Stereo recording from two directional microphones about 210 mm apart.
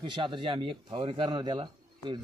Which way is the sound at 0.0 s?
20° right (ahead or behind).